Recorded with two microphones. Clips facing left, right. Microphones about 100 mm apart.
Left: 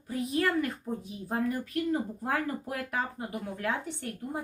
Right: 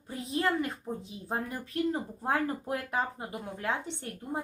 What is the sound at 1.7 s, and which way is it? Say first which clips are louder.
Speech: right 3 dB; 25° right (ahead or behind).